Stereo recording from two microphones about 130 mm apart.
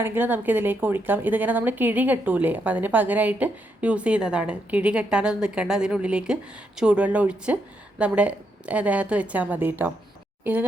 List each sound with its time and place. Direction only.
0.0 s a woman's voice: 15° right (ahead or behind)